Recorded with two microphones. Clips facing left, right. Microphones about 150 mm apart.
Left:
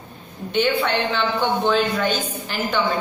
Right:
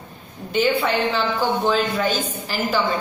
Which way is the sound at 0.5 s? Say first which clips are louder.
Right 1 dB; 5° right (ahead or behind).